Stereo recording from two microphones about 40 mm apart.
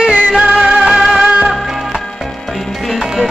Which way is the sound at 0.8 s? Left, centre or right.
Centre.